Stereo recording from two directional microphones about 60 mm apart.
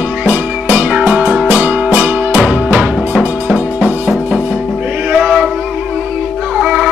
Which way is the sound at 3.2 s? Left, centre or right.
Centre.